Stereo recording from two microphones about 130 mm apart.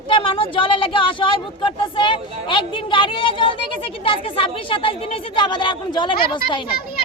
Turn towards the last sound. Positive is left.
turn(degrees=40)  # may be behind; listen again after turning